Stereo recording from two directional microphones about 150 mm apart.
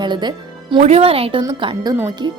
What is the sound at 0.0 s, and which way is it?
Music, 30° right (ahead or behind).